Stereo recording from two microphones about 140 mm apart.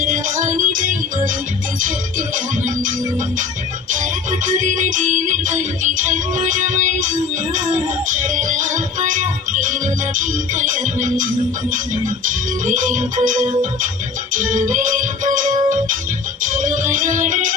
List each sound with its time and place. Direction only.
0.0 s music: 70° right (ahead or behind)
3.9 s music: 65° right (ahead or behind)